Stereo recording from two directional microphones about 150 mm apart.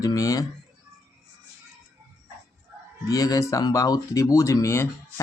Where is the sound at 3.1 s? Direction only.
25° left (ahead or behind).